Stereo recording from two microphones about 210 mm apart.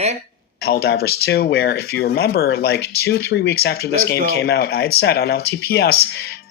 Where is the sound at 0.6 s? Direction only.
50° left (ahead or behind).